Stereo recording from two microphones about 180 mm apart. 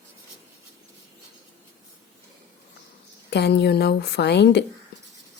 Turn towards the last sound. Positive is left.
turn(degrees=70)  # may be behind; listen again after turning